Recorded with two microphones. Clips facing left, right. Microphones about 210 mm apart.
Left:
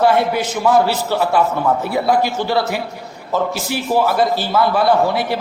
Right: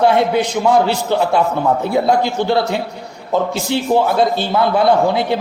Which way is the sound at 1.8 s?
20° right (ahead or behind).